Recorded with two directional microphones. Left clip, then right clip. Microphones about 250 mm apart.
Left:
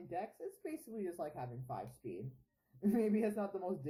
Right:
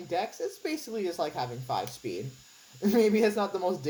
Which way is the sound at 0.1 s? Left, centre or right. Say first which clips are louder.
Right 12 dB; centre.